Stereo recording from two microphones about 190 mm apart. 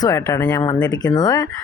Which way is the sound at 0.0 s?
15° left (ahead or behind).